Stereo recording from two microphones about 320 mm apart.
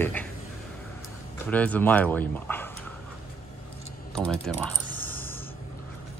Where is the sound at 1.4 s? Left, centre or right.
Centre.